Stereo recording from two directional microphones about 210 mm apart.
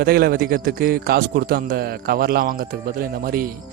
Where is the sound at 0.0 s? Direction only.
45° right (ahead or behind).